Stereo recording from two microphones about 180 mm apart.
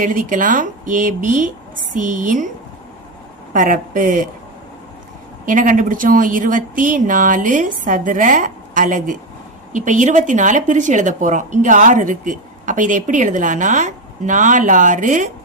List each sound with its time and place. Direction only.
0.0 s a woman's voice: 45° right (ahead or behind)
3.5 s a woman's voice: 45° right (ahead or behind)
5.5 s a woman's voice: 45° right (ahead or behind)